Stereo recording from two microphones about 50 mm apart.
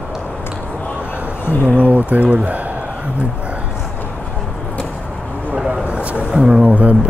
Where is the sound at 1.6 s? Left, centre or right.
Right.